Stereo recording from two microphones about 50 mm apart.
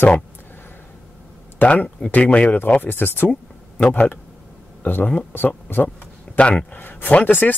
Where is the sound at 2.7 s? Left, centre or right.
Left.